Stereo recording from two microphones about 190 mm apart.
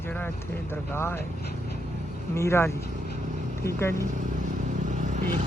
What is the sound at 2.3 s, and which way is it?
Speech, 15° left (ahead or behind).